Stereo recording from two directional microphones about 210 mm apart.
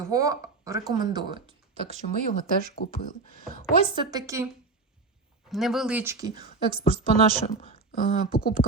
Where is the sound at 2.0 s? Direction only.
35° left (ahead or behind).